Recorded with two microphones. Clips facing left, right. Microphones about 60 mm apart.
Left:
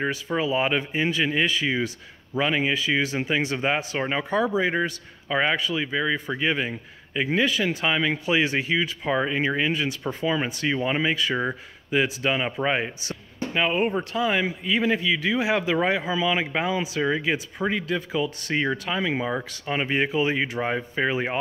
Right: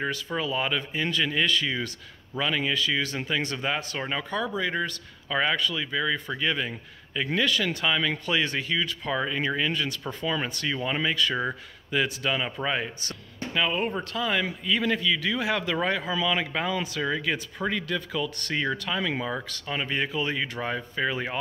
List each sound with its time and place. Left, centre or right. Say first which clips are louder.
0.4 s speech: left 5 dB; left
13.8 s speech: left 4 dB; centre